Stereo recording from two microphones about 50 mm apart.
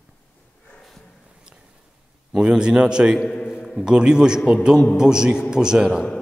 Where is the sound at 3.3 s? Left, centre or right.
Left.